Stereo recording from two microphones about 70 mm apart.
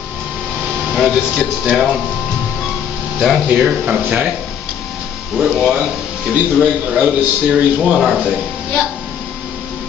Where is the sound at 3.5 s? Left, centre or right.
Centre.